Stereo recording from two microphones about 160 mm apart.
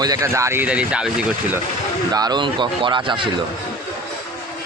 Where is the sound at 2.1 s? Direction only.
25° right (ahead or behind).